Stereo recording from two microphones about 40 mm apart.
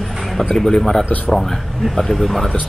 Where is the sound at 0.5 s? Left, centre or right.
Centre.